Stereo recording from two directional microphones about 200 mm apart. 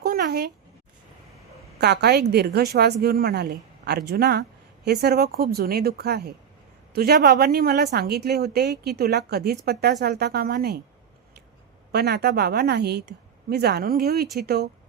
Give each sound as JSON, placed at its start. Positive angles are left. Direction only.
{"t": 0.0, "sound": "a sound", "side_deg": -50}
{"t": 1.8, "sound": "a woman's voice", "side_deg": -55}
{"t": 11.9, "sound": "a woman's voice", "side_deg": -50}